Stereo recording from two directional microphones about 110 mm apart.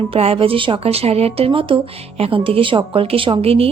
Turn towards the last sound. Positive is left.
turn(degrees=-60)  # may be behind; listen again after turning